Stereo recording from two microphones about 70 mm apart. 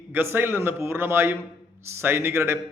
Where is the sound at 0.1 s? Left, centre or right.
Right.